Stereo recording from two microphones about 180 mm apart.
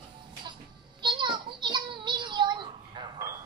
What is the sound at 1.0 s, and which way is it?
Child singing, 25° right (ahead or behind).